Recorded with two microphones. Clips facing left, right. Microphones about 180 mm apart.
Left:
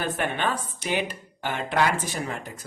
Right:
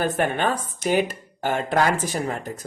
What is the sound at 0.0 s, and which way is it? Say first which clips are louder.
Speech: right 5 dB; 45° right (ahead or behind).